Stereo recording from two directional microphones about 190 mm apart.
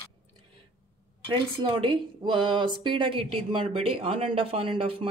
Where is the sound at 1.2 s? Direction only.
25° right (ahead or behind).